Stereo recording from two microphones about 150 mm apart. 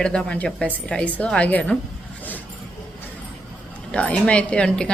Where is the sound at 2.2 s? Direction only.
10° left (ahead or behind).